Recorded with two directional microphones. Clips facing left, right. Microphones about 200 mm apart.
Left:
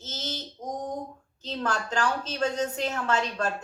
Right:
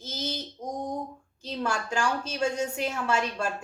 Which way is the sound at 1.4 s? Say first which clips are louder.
Even; 10° right (ahead or behind).